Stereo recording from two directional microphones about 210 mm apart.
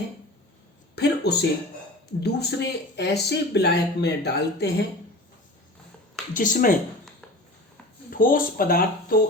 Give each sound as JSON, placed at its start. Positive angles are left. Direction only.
{"t": 0.9, "sound": "a sound", "side_deg": 50}
{"t": 2.2, "sound": "speech", "side_deg": 50}
{"t": 6.3, "sound": "speech", "side_deg": 40}
{"t": 8.1, "sound": "speech", "side_deg": 40}